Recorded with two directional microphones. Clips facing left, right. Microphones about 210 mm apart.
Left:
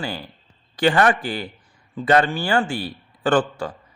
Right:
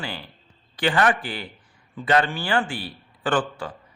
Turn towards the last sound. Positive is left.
turn(degrees=45)  # may be behind; listen again after turning